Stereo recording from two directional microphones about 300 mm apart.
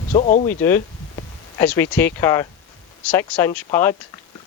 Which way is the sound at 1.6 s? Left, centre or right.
Centre.